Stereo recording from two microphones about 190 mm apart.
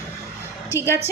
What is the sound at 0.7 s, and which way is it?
Speech, 15° left (ahead or behind).